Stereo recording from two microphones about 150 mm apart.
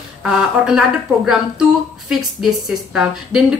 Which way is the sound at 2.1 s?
Centre (ahead or behind).